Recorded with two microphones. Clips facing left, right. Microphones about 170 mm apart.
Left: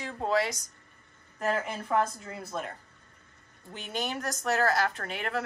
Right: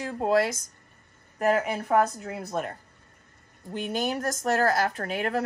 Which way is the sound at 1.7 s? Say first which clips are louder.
Right 5 dB; 65° right (ahead or behind).